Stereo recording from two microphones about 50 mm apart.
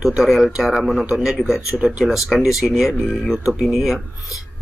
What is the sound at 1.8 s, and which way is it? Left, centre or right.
Speech, centre.